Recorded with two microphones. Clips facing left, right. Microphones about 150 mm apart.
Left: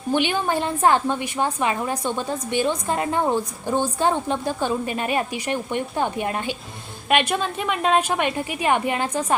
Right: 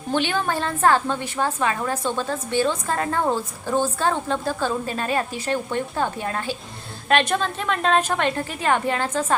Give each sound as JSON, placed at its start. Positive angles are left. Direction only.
{"t": 0.1, "sound": "a woman's voice", "side_deg": 15}